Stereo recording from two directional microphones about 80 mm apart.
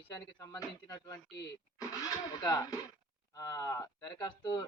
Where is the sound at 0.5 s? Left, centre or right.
Left.